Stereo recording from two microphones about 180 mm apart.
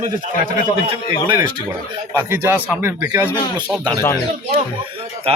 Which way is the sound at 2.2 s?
15° right (ahead or behind).